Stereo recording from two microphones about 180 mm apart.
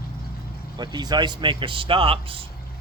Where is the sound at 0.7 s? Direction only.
25° right (ahead or behind).